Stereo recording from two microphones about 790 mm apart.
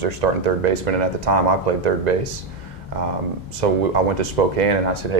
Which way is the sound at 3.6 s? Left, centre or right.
Right.